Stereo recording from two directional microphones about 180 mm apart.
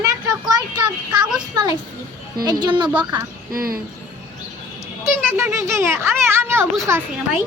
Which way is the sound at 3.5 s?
55° right (ahead or behind).